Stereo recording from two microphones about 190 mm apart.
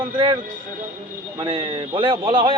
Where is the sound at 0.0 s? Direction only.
25° right (ahead or behind).